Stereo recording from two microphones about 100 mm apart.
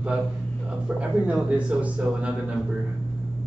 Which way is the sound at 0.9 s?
10° right (ahead or behind).